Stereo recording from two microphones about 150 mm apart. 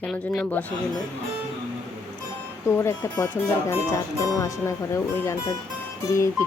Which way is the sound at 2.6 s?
15° left (ahead or behind).